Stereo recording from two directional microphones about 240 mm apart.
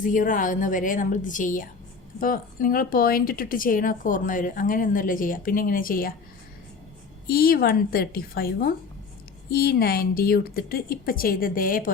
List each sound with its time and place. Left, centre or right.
0.0 s speech: left
7.3 s speech: left